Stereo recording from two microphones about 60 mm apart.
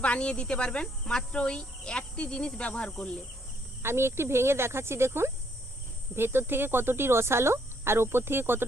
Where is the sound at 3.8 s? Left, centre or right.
Right.